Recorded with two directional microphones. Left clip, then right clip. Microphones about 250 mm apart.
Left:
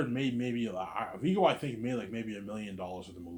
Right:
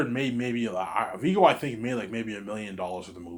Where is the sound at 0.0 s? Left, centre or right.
Centre.